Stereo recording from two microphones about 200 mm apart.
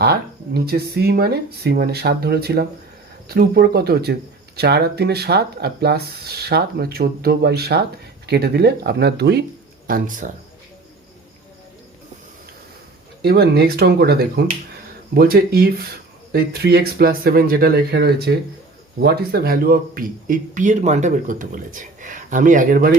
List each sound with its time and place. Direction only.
0.0 s speech: 50° right (ahead or behind)
9.8 s a man's voice: 45° right (ahead or behind)
13.2 s a man's voice: 55° right (ahead or behind)